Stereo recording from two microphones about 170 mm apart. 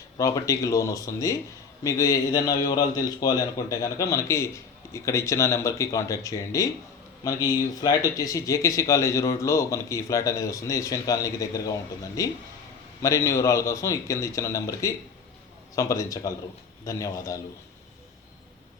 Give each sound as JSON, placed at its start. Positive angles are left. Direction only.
{"t": 0.2, "sound": "speech", "side_deg": 20}
{"t": 7.8, "sound": "speech", "side_deg": 20}